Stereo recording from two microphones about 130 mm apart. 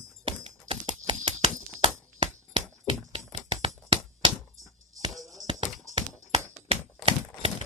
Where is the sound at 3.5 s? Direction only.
40° right (ahead or behind).